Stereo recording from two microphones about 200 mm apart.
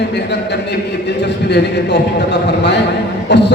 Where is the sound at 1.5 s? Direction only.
60° left (ahead or behind).